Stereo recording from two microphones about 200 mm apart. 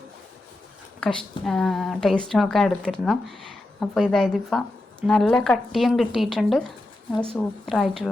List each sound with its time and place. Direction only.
0.9 s speech: centre (ahead or behind)